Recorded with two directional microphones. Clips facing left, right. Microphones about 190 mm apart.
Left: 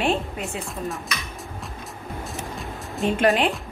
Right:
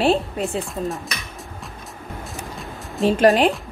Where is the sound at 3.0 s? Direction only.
35° right (ahead or behind).